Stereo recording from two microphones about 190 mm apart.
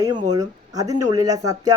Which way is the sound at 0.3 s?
20° right (ahead or behind).